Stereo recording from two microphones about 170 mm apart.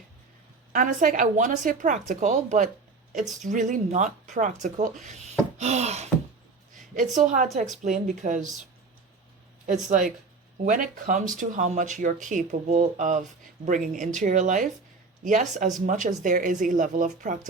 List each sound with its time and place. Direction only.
0.7 s speech: 50° right (ahead or behind)
6.7 s a sound: 50° right (ahead or behind)
7.2 s speech: 45° right (ahead or behind)
10.7 s speech: 50° right (ahead or behind)